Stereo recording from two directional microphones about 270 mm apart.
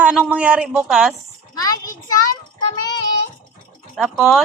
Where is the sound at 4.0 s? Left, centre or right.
Centre.